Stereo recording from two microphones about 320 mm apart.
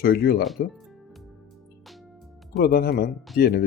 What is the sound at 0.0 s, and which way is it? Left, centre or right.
Speech, left.